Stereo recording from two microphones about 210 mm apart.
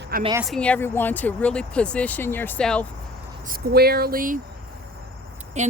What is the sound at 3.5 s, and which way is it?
Speech, 50° right (ahead or behind).